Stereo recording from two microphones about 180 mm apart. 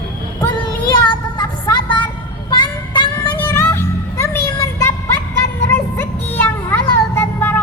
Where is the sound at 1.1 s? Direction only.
25° left (ahead or behind).